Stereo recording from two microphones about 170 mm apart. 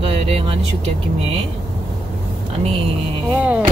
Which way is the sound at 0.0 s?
35° right (ahead or behind).